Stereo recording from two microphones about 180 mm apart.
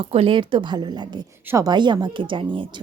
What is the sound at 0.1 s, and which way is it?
A woman's voice, 30° right (ahead or behind).